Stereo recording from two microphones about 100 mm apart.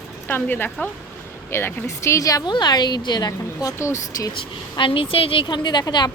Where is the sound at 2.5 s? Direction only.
45° left (ahead or behind); by 4.3 s 30° left (ahead or behind).